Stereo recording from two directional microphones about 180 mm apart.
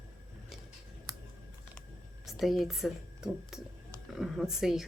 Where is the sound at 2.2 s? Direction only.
Centre (ahead or behind).